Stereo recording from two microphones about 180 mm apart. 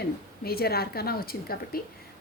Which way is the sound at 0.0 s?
60° left (ahead or behind).